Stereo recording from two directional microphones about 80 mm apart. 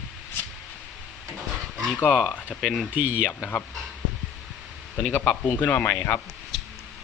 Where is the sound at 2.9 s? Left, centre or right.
Centre.